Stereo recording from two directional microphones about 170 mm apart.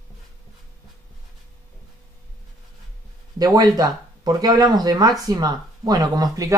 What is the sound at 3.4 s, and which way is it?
Speech, 20° right (ahead or behind).